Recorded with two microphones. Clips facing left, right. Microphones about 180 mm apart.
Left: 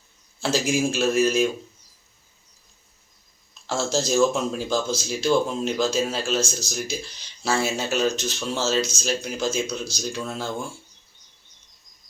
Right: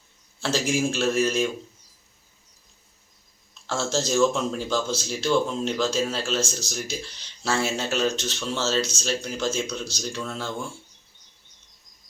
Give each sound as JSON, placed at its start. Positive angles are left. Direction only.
{"t": 0.4, "sound": "speech", "side_deg": 10}
{"t": 3.7, "sound": "speech", "side_deg": 10}